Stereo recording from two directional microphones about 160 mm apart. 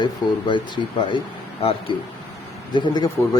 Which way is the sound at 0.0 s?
30° left (ahead or behind).